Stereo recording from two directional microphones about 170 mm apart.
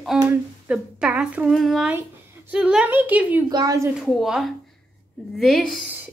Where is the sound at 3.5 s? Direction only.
20° right (ahead or behind).